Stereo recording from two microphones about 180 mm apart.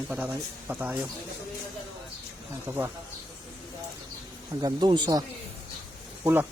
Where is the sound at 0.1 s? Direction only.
10° right (ahead or behind).